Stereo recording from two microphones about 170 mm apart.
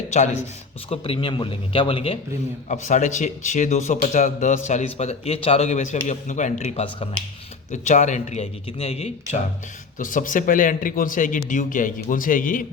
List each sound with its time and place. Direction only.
0.9 s a man's voice: 30° left (ahead or behind)
2.6 s a man's voice: 45° left (ahead or behind)
10.0 s speech: 50° left (ahead or behind)